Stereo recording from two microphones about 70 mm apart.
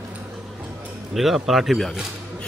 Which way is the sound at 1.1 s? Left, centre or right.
Centre.